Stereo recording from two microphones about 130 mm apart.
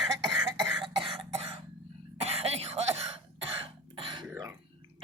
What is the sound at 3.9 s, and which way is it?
Throat clearing, 40° right (ahead or behind).